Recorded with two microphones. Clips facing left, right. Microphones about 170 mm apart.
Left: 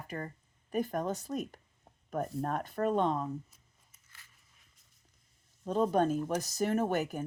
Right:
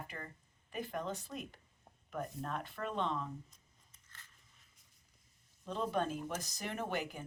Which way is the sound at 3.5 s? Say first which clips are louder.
Even; 5° left (ahead or behind).